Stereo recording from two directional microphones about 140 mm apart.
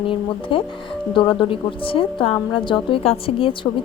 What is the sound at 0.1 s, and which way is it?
A woman's voice, 40° left (ahead or behind).